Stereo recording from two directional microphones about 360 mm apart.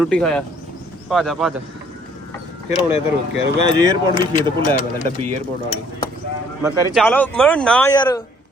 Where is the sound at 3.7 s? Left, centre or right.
Centre.